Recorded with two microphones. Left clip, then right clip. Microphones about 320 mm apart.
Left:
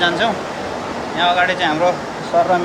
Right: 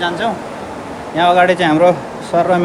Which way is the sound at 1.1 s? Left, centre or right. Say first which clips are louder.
Right 5 dB; centre.